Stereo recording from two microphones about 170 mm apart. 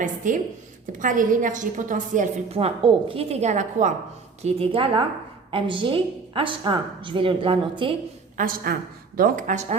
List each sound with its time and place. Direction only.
0.2 s a woman's voice: 50° right (ahead or behind)
4.4 s a woman's voice: 35° right (ahead or behind)
8.4 s a woman's voice: 55° right (ahead or behind)